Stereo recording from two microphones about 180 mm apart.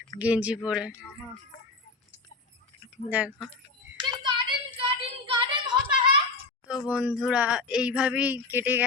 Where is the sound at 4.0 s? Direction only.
25° right (ahead or behind).